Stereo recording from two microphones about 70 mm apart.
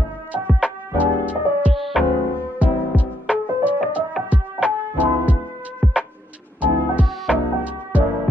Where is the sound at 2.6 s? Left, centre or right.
Right.